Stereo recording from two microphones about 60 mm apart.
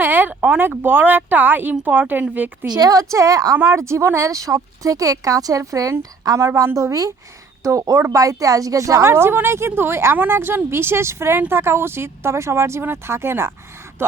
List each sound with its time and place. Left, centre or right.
0.0 s a woman's voice: right
3.0 s a woman's voice: right
3.6 s speech: right
6.7 s speech: right